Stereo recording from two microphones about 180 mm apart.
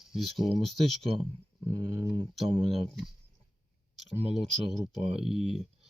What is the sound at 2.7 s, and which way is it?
Speech, centre (ahead or behind).